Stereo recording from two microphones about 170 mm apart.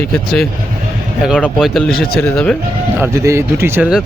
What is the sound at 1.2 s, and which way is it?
Speech, centre (ahead or behind).